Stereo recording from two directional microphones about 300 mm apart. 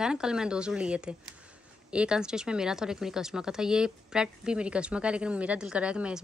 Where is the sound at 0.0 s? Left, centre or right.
Centre.